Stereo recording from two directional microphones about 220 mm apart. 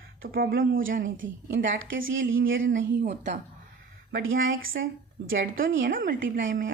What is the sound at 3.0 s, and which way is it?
Speech, 35° right (ahead or behind).